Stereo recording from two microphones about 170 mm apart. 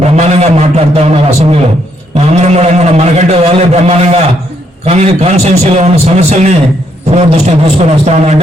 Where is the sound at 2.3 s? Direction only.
40° right (ahead or behind).